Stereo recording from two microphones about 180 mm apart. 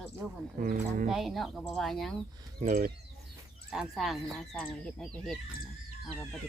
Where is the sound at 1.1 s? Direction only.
Centre (ahead or behind).